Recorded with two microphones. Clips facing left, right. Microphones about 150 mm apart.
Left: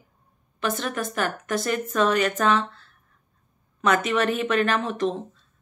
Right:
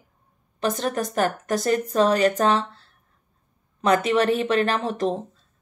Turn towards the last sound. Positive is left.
turn(degrees=-40)  # may be behind; listen again after turning